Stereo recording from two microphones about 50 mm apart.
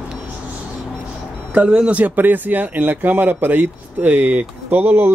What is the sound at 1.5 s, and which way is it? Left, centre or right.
Speech, right.